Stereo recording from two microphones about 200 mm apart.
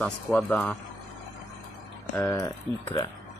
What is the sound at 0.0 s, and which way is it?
Speech, 5° left (ahead or behind).